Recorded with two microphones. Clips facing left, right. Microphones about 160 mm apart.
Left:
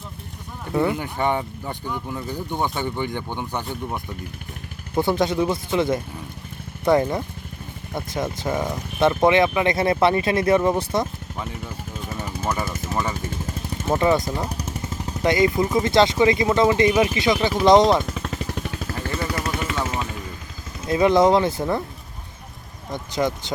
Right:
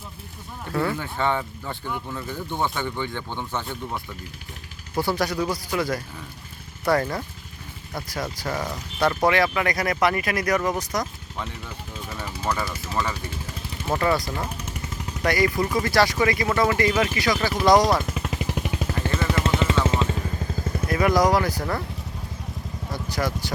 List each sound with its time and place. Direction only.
0.7 s speech: 15° left (ahead or behind)
4.9 s speech: 20° left (ahead or behind)
12.1 s a sound: 20° left (ahead or behind)
12.9 s speech: 20° left (ahead or behind)
18.1 s a sound: 10° right (ahead or behind)
19.4 s vehicle: 25° right (ahead or behind)
20.8 s speech: 25° left (ahead or behind)
22.9 s speech: 20° left (ahead or behind)